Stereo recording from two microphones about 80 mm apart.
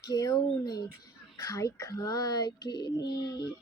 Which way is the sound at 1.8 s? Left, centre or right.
Left.